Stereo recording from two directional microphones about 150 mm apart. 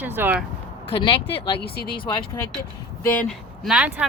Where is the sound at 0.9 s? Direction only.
35° left (ahead or behind).